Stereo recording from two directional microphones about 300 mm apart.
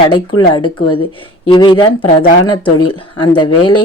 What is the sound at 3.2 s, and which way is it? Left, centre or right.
Speech, centre.